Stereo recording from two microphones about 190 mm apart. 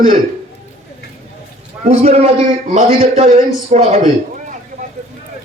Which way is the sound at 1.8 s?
35° right (ahead or behind).